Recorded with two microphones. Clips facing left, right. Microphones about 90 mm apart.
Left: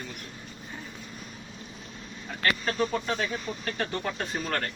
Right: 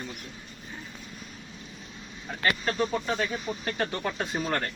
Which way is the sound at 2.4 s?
Centre (ahead or behind).